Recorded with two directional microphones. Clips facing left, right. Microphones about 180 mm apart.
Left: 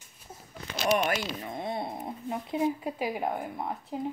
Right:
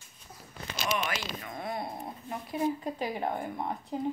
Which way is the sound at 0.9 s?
45° left (ahead or behind).